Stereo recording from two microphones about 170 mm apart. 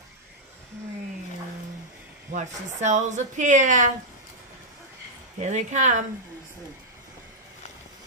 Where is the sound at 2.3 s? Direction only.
45° right (ahead or behind).